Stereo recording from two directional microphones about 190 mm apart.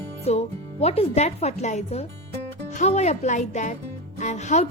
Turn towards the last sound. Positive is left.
turn(degrees=35)  # may be behind; listen again after turning